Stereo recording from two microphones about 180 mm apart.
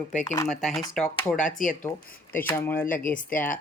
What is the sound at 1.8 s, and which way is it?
Speech, 10° left (ahead or behind).